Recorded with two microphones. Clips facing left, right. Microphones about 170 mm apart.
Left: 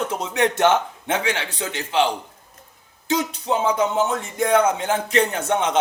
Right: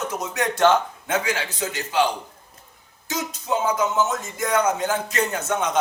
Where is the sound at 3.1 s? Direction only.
30° left (ahead or behind).